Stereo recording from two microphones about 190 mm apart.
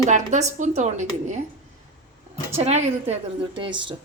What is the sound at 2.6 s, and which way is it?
A woman's voice, 35° right (ahead or behind).